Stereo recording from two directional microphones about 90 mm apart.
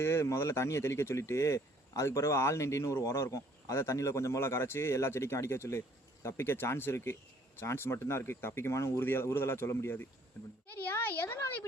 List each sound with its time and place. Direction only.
0.0 s speech: 30° left (ahead or behind)